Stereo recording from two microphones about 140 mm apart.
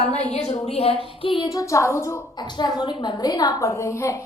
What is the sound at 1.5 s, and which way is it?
Speech, 25° left (ahead or behind).